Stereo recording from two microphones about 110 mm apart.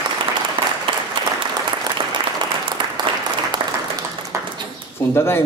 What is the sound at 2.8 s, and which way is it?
Applause, 45° right (ahead or behind).